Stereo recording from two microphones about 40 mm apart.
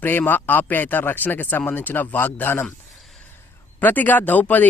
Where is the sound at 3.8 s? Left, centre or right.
Left.